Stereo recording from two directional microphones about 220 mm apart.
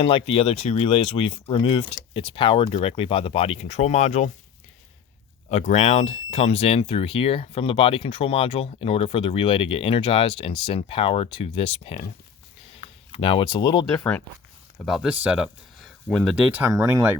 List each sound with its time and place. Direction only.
0.0 s speech: 25° left (ahead or behind)
5.5 s speech: 30° left (ahead or behind)
12.7 s a sound: 25° left (ahead or behind)
14.8 s speech: 5° right (ahead or behind)